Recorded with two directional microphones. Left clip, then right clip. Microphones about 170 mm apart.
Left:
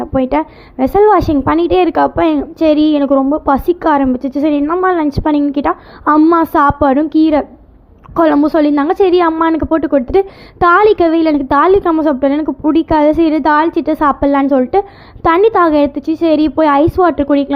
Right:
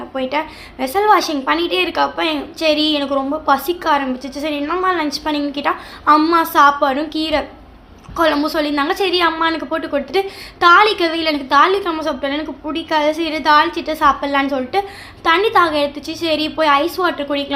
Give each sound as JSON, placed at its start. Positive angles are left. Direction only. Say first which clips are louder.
{"t": 0.1, "sound": "a woman's voice", "louder": "left 5 dB", "side_deg": 50}
{"t": 3.1, "sound": "a woman's voice", "louder": "left 7 dB", "side_deg": 30}
{"t": 3.4, "sound": "a woman's voice", "louder": "left 4 dB", "side_deg": 50}
{"t": 4.6, "sound": "a woman's voice", "louder": "left 5 dB", "side_deg": 35}
{"t": 12.4, "sound": "a woman's voice", "louder": "left 10 dB", "side_deg": 30}
{"t": 12.7, "sound": "a woman's voice", "louder": "left 6 dB", "side_deg": 50}